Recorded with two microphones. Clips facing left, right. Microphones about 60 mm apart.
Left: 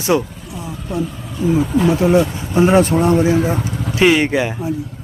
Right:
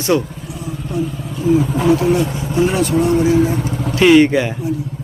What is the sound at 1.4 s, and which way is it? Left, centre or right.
Speech, left.